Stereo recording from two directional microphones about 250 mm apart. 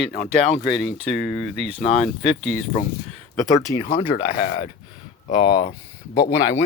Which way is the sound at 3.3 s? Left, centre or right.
Centre.